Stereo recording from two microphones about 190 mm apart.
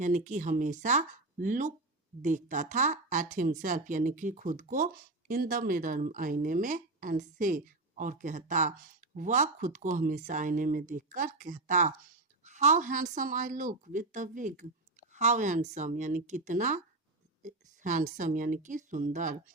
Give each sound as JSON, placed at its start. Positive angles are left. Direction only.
{"t": 0.0, "sound": "speech", "side_deg": -40}